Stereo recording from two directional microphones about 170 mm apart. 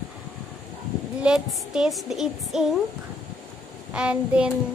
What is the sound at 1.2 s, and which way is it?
A woman's voice, 5° right (ahead or behind).